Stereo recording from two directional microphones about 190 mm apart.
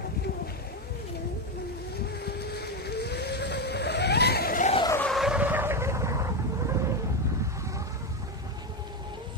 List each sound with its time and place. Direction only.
2.2 s vehicle: 55° left (ahead or behind)
4.8 s vehicle: 10° left (ahead or behind)
5.1 s vehicle: 5° right (ahead or behind)